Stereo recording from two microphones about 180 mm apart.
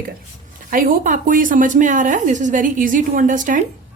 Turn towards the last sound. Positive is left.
turn(degrees=-45)  # may be behind; listen again after turning